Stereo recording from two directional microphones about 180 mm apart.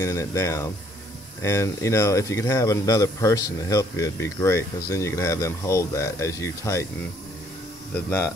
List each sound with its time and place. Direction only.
0.0 s speech: 15° left (ahead or behind)